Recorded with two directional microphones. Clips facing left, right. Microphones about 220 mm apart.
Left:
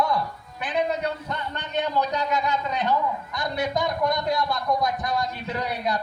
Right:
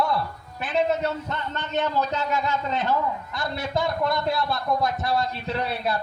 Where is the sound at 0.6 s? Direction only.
15° left (ahead or behind).